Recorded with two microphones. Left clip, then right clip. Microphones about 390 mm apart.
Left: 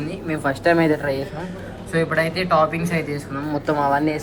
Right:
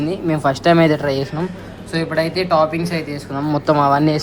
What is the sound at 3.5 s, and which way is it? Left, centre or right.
Speech, left.